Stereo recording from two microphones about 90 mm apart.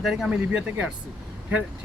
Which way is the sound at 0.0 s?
5° right (ahead or behind).